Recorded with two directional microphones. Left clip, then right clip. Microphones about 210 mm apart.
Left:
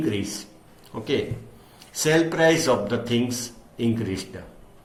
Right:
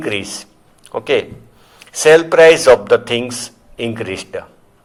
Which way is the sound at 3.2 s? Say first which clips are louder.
Right 4 dB; 50° right (ahead or behind).